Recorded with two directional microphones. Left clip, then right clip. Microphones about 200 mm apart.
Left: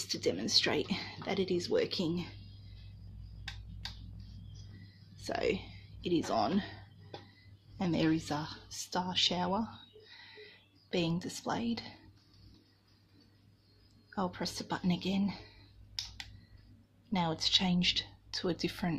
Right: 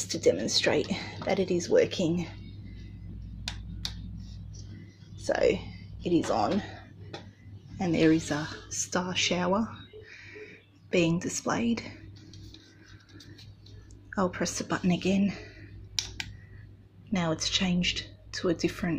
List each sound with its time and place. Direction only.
0.0 s speech: 10° left (ahead or behind)
5.2 s speech: 10° left (ahead or behind)
7.7 s speech: 10° left (ahead or behind)
8.9 s speech: centre (ahead or behind)
10.9 s a woman's voice: centre (ahead or behind)
14.1 s speech: 5° right (ahead or behind)
17.1 s speech: 5° left (ahead or behind)